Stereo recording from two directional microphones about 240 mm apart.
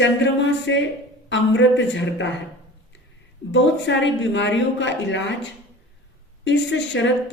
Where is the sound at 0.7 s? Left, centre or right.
Left.